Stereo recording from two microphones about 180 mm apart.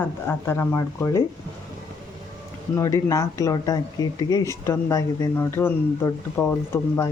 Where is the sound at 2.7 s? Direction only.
15° left (ahead or behind).